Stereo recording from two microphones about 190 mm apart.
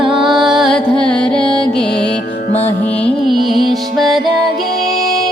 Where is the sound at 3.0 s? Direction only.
Centre (ahead or behind).